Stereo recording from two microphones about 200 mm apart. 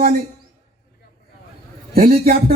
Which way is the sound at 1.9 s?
45° right (ahead or behind).